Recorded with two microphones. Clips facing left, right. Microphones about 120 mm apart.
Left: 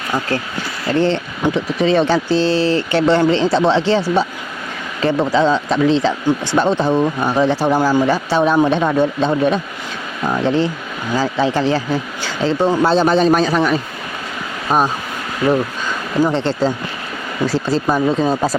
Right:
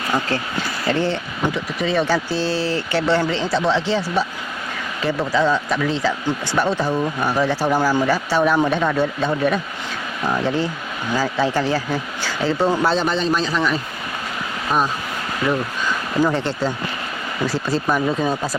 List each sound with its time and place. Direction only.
0.9 s speech: 10° right (ahead or behind)
1.5 s speech: 25° left (ahead or behind)
2.4 s speech: 10° right (ahead or behind)
2.9 s speech: 20° left (ahead or behind)
12.9 s speech: 35° left (ahead or behind)
13.1 s a man's voice: 50° left (ahead or behind)
14.7 s speech: 30° left (ahead or behind)
16.3 s speech: 30° left (ahead or behind)